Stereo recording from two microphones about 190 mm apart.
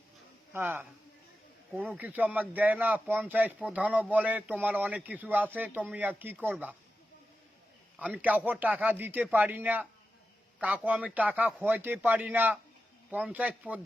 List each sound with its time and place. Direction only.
0.5 s speech: 10° right (ahead or behind)
2.0 s speech: 10° right (ahead or behind)
7.9 s speech: 5° right (ahead or behind)